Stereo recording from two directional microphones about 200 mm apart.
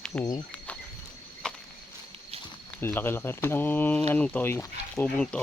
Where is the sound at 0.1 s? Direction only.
15° left (ahead or behind).